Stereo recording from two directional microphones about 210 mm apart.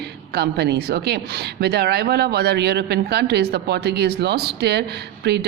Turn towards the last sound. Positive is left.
turn(degrees=-50)  # may be behind; listen again after turning